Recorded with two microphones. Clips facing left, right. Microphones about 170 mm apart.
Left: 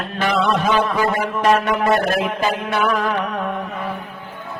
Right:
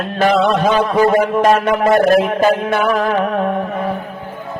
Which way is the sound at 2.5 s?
55° right (ahead or behind).